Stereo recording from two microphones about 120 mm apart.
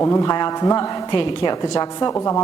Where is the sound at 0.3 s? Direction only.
40° left (ahead or behind).